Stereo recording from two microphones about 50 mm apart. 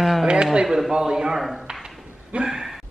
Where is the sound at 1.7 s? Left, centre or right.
Right.